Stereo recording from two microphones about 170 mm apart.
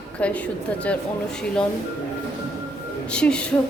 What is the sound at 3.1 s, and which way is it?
Speech, 5° left (ahead or behind).